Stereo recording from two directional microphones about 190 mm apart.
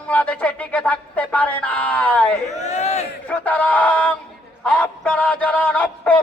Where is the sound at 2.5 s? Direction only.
35° left (ahead or behind).